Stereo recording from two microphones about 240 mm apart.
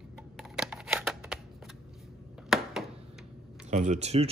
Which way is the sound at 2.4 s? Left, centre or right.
Centre.